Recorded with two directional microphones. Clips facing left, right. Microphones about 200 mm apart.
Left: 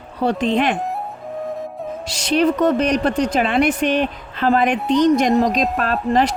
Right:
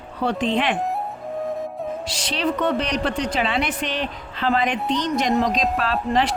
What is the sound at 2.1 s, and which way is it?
A woman's voice, 45° left (ahead or behind).